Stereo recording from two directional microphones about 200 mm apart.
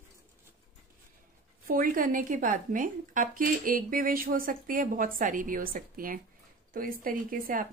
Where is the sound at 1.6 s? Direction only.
45° right (ahead or behind).